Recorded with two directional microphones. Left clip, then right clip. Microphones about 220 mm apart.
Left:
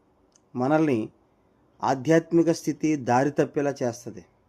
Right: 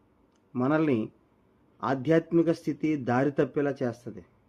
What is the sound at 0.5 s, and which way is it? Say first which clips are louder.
A man's voice: left 3 dB; 5° left (ahead or behind).